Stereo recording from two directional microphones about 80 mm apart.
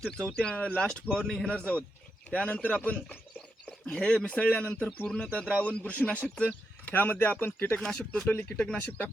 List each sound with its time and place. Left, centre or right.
0.0 s a man's voice: centre
6.9 s speech: left
7.8 s a man's voice: centre
8.3 s speech: left
8.5 s a man's voice: centre